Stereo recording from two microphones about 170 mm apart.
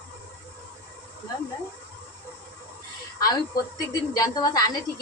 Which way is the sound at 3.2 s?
20° left (ahead or behind).